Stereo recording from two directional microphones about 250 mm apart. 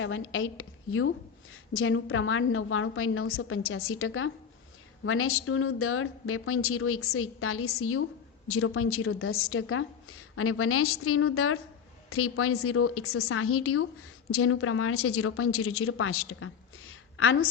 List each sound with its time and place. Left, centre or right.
0.0 s a woman's voice: left